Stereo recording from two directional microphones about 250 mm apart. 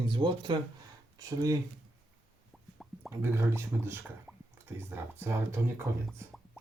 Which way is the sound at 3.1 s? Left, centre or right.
Centre.